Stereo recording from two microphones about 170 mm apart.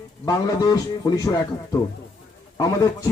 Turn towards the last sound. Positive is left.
turn(degrees=20)  # may be behind; listen again after turning